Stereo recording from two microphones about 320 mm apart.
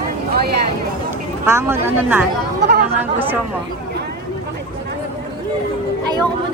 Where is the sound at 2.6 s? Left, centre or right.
Right.